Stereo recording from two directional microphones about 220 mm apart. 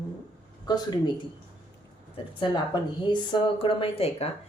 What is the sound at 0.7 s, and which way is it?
Speech, 20° left (ahead or behind).